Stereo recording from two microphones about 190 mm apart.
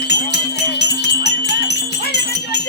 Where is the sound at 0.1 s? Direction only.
60° left (ahead or behind).